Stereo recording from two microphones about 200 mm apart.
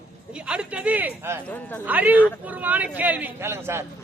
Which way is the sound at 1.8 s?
10° right (ahead or behind).